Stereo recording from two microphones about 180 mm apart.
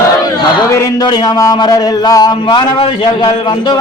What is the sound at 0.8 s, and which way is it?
Speech, 20° left (ahead or behind).